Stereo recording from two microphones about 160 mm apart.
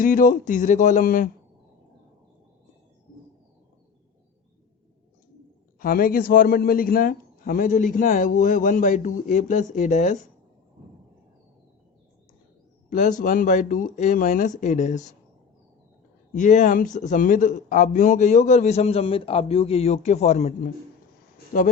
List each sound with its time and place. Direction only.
0.0 s a man's voice: 55° left (ahead or behind)
5.8 s a man's voice: 65° left (ahead or behind)
12.9 s a man's voice: 50° left (ahead or behind)
16.3 s a man's voice: 50° left (ahead or behind)